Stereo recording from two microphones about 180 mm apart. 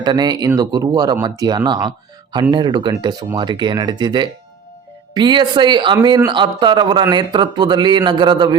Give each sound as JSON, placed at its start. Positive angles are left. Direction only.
{"t": 0.0, "sound": "speech", "side_deg": -25}